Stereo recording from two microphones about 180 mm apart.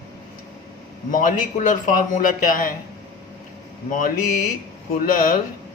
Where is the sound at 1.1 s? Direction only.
50° left (ahead or behind).